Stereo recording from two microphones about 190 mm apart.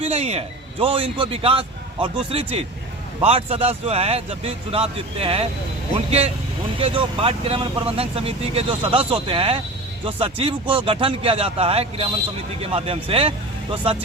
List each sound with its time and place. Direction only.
0.0 s a man's voice: 35° right (ahead or behind)